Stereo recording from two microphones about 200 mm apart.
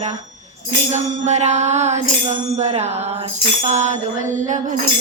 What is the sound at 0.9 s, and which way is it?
Music, 35° right (ahead or behind).